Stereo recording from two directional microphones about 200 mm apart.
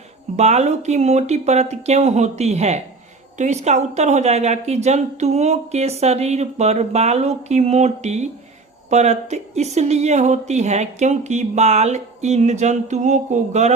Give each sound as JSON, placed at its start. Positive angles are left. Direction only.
{"t": 0.3, "sound": "speech", "side_deg": -35}